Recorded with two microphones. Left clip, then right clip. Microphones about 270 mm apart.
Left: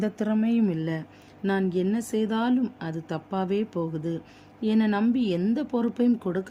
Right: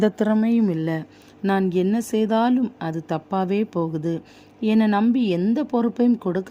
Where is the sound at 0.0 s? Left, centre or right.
Centre.